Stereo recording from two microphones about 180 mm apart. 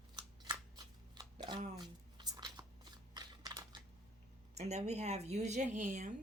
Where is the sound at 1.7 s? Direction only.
25° right (ahead or behind).